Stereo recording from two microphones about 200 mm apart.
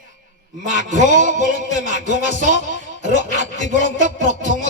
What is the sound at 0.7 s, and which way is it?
Music, 40° right (ahead or behind).